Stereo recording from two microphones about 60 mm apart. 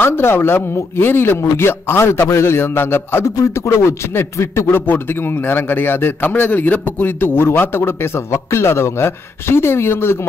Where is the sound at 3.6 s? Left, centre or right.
Left.